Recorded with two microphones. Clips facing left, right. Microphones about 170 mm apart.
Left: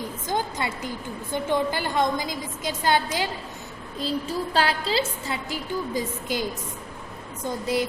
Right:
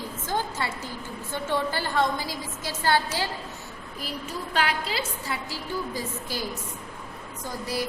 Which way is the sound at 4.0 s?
30° left (ahead or behind).